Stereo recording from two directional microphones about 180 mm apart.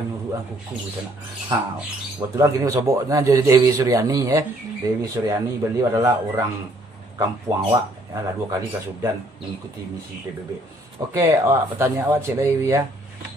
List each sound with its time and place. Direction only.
2.1 s a man's voice: 20° right (ahead or behind)
11.0 s a man's voice: 20° right (ahead or behind)